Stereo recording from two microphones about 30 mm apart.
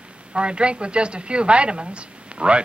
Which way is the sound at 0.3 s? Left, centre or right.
Right.